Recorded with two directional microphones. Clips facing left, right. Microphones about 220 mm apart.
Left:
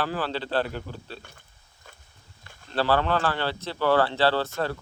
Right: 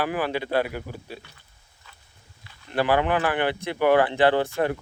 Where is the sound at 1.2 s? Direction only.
50° left (ahead or behind).